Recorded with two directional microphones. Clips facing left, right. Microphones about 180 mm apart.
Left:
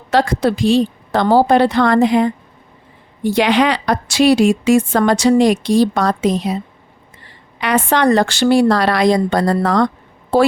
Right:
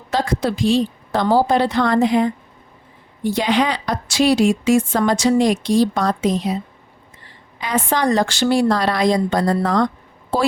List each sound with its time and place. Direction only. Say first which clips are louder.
0.1 s a woman's voice: left 5 dB; 70° left (ahead or behind)
7.6 s a woman's voice: left 5 dB; 70° left (ahead or behind)